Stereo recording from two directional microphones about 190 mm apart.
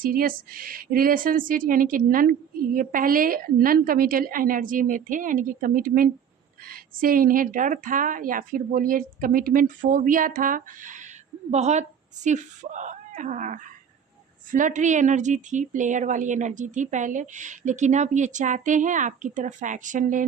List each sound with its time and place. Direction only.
0.0 s a woman's voice: 50° right (ahead or behind)